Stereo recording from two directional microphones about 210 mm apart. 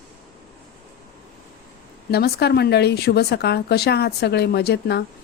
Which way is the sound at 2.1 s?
50° left (ahead or behind).